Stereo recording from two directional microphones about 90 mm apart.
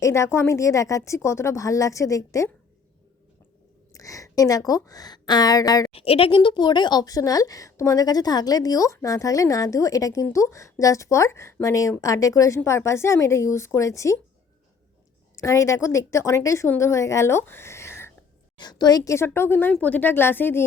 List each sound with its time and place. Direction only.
0.0 s speech: 35° left (ahead or behind)
3.9 s a woman's voice: 40° left (ahead or behind)
5.9 s speech: 90° left; by 14.2 s 35° left (ahead or behind)
15.4 s speech: 35° left (ahead or behind)
18.5 s a woman's voice: 50° left (ahead or behind)
19.1 s speech: 25° left (ahead or behind)